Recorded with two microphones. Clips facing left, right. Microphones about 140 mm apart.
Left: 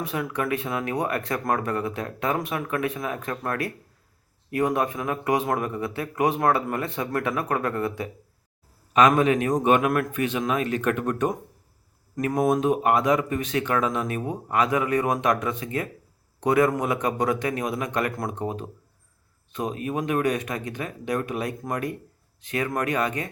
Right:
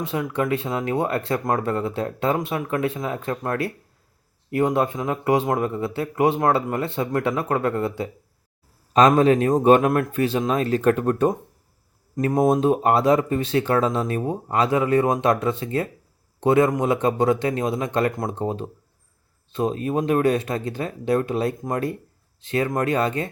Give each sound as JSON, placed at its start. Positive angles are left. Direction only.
{"t": 0.0, "sound": "speech", "side_deg": -25}